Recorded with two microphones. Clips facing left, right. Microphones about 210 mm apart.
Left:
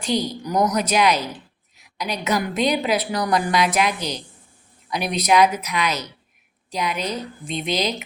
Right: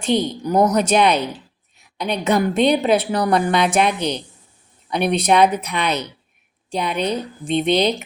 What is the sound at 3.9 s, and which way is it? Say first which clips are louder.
Speech: right 5 dB; 60° right (ahead or behind).